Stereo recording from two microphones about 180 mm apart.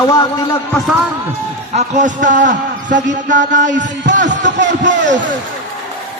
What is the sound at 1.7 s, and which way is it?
A man's voice, 45° right (ahead or behind).